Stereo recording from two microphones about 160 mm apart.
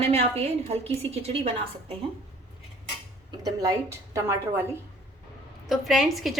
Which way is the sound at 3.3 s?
20° right (ahead or behind).